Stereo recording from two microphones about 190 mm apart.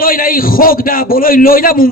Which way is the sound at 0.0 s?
50° left (ahead or behind).